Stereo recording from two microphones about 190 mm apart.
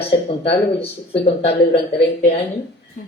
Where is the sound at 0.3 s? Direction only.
30° left (ahead or behind).